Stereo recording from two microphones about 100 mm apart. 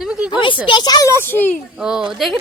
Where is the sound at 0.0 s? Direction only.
10° right (ahead or behind).